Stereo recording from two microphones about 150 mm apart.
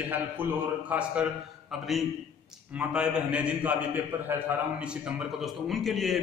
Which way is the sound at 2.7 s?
5° right (ahead or behind).